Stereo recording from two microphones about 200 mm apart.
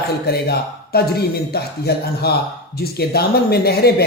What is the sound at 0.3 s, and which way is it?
Speech, 50° left (ahead or behind).